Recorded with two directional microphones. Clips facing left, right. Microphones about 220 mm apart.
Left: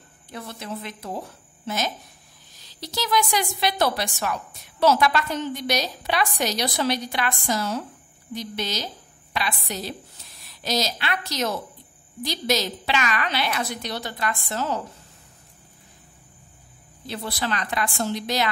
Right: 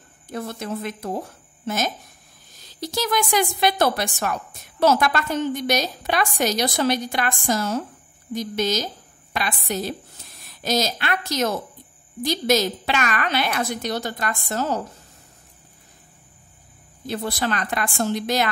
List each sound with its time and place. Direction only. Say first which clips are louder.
0.3 s a woman's voice: right 5 dB; 45° right (ahead or behind)
2.6 s a woman's voice: right 4 dB; 50° right (ahead or behind)
17.0 s a woman's voice: right 4 dB; 45° right (ahead or behind)